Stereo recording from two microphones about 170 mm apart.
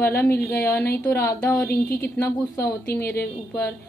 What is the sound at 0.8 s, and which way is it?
Speech, 65° left (ahead or behind).